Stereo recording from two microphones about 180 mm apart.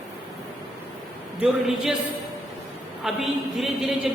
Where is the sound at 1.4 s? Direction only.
5° right (ahead or behind).